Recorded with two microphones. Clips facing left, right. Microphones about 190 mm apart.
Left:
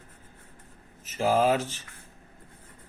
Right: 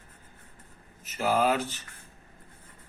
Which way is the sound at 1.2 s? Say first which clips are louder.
Left 2 dB; 30° left (ahead or behind).